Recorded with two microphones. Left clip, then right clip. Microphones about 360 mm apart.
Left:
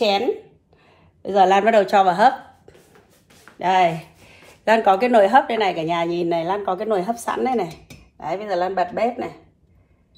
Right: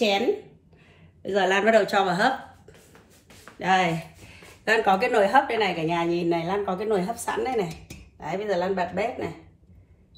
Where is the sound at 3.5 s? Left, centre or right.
Centre.